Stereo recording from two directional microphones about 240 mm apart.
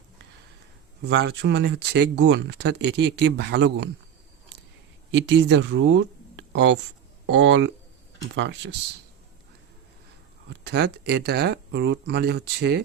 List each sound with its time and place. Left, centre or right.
1.0 s speech: right
5.1 s speech: right
10.5 s speech: right